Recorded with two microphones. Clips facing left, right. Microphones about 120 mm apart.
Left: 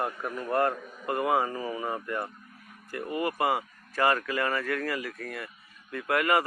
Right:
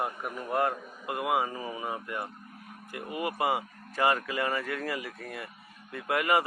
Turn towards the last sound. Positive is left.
turn(degrees=-20)  # may be behind; listen again after turning